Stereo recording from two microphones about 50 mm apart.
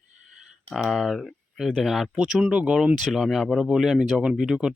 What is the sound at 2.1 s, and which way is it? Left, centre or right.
Speech, right.